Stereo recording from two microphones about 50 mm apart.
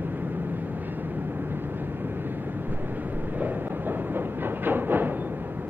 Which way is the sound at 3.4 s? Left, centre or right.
Right.